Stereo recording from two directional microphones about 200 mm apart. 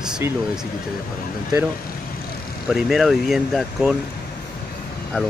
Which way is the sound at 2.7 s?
Centre (ahead or behind).